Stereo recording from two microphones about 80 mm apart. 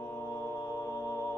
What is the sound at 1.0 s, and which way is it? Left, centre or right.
Music, left.